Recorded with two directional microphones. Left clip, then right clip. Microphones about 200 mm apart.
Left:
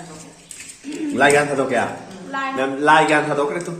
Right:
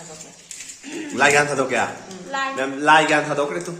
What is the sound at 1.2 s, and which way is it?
A man's voice, 10° right (ahead or behind).